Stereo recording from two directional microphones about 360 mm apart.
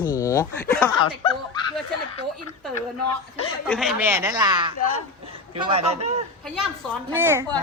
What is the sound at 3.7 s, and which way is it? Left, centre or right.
A woman's voice, centre.